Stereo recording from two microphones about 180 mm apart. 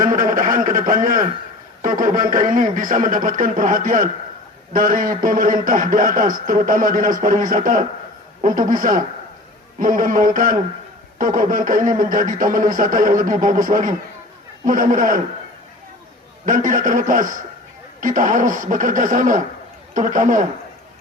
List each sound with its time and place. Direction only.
0.0 s a sound: 45° right (ahead or behind)
1.8 s a man's voice: 50° right (ahead or behind)
16.5 s a man's voice: 45° right (ahead or behind)